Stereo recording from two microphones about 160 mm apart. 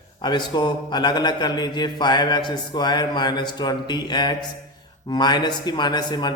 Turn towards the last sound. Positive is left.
turn(degrees=25)  # may be behind; listen again after turning